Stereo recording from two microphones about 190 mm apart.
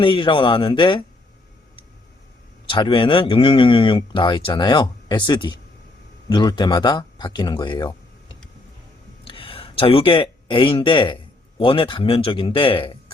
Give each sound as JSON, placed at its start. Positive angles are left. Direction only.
{"t": 0.0, "sound": "speech", "side_deg": 25}
{"t": 2.6, "sound": "speech", "side_deg": 25}